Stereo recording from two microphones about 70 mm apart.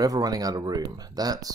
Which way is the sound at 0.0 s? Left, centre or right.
Right.